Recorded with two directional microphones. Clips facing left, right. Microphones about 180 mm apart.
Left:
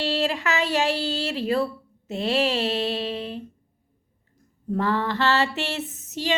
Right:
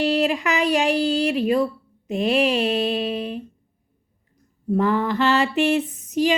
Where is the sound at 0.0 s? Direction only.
15° right (ahead or behind).